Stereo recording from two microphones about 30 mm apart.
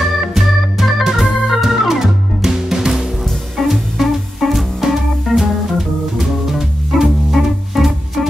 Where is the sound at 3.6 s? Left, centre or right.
Centre.